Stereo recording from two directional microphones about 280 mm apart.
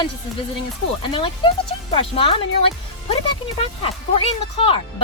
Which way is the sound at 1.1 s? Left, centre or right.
Centre.